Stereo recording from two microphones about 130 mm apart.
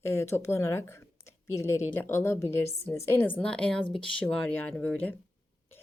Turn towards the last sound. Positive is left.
turn(degrees=10)  # may be behind; listen again after turning